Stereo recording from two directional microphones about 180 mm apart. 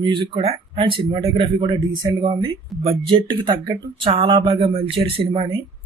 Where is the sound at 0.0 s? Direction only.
30° right (ahead or behind).